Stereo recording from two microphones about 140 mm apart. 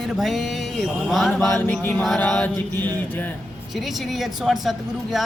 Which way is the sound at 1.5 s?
20° left (ahead or behind).